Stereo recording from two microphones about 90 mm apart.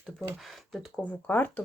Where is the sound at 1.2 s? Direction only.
20° left (ahead or behind).